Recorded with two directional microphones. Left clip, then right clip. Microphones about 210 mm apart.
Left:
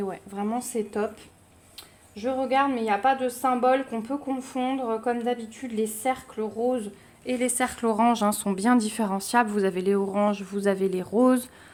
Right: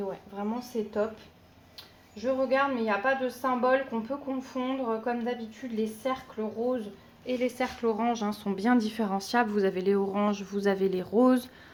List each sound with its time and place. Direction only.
0.1 s a woman's voice: 50° left (ahead or behind)
2.1 s a woman's voice: 50° left (ahead or behind); by 11.4 s 10° left (ahead or behind)